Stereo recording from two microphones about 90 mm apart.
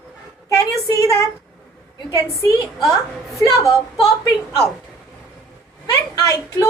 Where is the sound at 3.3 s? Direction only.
35° left (ahead or behind).